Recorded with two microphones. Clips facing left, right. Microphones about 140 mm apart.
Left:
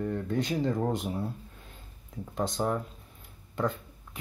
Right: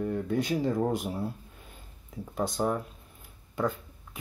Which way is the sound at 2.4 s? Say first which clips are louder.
Right 1 dB; 5° right (ahead or behind).